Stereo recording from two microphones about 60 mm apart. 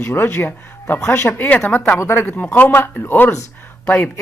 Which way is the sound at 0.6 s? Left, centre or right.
Left.